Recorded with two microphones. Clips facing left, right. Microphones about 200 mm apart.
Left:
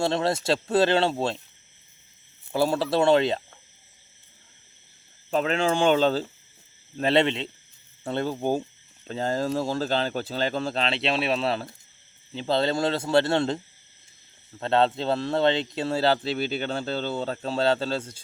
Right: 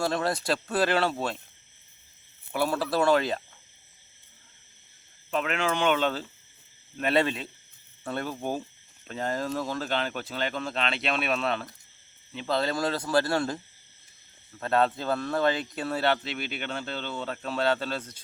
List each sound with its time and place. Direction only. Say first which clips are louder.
0.0 s speech: left 3 dB; 25° left (ahead or behind)
2.5 s speech: left 4 dB; 30° left (ahead or behind)
5.3 s speech: left 4 dB; 30° left (ahead or behind)
14.6 s speech: left 3 dB; 25° left (ahead or behind)